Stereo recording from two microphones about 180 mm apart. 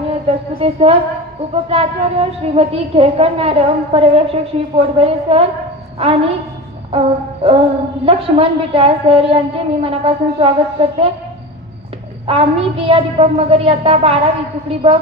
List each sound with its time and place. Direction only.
0.3 s a woman's voice: 35° right (ahead or behind)
12.3 s a woman's voice: 30° right (ahead or behind)